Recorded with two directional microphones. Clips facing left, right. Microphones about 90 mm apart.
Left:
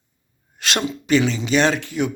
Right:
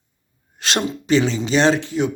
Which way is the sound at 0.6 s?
30° right (ahead or behind).